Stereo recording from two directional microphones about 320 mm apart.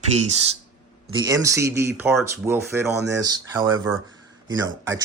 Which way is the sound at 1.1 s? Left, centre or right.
Centre.